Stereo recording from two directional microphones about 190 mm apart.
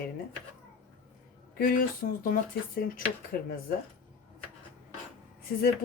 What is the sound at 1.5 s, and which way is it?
Speech, 50° left (ahead or behind).